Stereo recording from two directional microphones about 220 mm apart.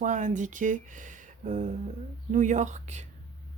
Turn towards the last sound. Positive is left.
turn(degrees=-35)  # may be behind; listen again after turning